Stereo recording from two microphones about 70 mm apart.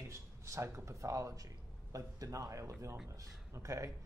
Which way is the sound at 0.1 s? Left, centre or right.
Right.